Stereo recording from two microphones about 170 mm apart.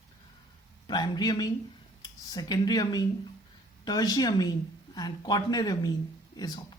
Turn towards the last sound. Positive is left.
turn(degrees=25)  # may be behind; listen again after turning